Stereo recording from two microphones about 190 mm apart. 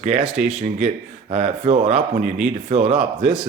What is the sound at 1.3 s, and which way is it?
Speech, 35° right (ahead or behind).